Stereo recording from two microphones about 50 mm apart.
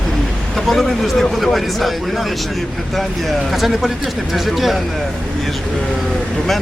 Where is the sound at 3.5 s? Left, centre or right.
Centre.